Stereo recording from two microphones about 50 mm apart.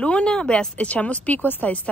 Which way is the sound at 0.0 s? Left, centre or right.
Left.